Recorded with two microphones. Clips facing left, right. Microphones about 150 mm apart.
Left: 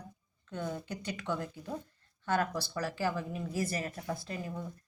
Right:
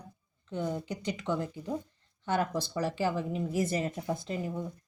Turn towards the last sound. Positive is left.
turn(degrees=-20)  # may be behind; listen again after turning